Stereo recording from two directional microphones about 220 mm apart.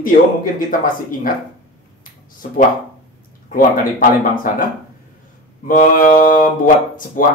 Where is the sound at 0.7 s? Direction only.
40° left (ahead or behind).